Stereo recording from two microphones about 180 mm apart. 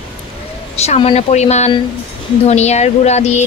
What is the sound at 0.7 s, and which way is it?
A woman's voice, 35° left (ahead or behind).